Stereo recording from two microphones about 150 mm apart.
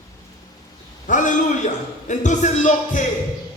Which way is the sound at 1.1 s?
55° left (ahead or behind).